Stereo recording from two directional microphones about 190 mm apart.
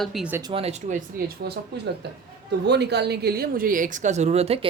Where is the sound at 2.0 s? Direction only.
60° right (ahead or behind); by 4.7 s 30° right (ahead or behind).